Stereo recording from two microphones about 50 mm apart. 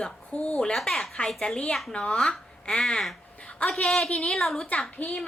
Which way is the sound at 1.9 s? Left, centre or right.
Left.